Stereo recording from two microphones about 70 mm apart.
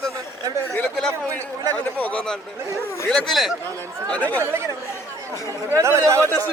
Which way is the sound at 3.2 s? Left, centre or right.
Centre.